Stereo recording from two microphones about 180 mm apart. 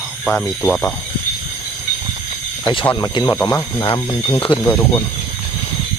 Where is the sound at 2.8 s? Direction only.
20° left (ahead or behind).